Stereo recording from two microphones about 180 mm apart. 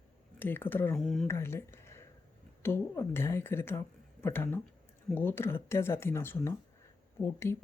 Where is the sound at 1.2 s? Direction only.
15° left (ahead or behind).